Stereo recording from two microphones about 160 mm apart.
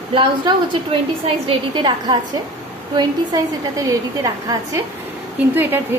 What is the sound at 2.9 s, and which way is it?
A woman's voice, 25° right (ahead or behind).